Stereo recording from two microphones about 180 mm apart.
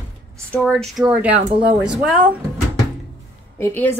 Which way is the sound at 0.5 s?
5° left (ahead or behind).